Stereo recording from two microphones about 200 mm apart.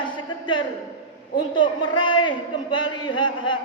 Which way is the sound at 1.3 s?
25° left (ahead or behind).